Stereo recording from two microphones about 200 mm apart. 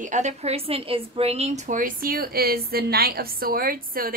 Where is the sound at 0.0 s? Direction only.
35° right (ahead or behind).